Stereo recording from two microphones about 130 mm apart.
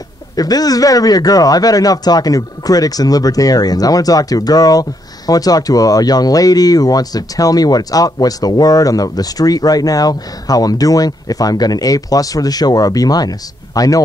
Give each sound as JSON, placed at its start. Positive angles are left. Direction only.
{"t": 0.4, "sound": "speech", "side_deg": 30}